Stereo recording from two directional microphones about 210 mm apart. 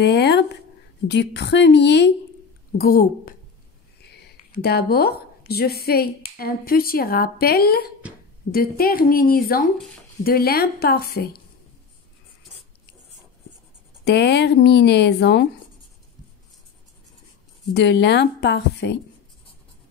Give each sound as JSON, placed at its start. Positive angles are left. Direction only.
{"t": 0.0, "sound": "a sound", "side_deg": 50}
{"t": 1.0, "sound": "a woman's voice", "side_deg": 55}
{"t": 2.8, "sound": "a woman's voice", "side_deg": 45}
{"t": 14.0, "sound": "speech", "side_deg": 55}
{"t": 17.7, "sound": "speech", "side_deg": 55}